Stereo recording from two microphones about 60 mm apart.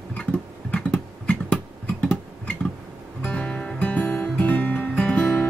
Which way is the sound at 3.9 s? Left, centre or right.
Left.